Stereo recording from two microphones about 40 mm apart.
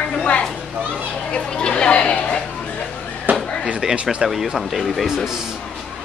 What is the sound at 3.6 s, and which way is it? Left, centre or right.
Speech, right.